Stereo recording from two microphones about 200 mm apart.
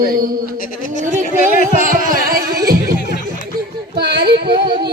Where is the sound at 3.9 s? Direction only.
55° right (ahead or behind).